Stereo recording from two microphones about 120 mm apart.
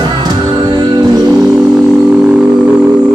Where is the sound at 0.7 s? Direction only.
35° right (ahead or behind).